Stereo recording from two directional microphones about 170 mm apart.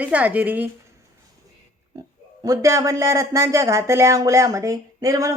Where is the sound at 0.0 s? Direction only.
10° right (ahead or behind).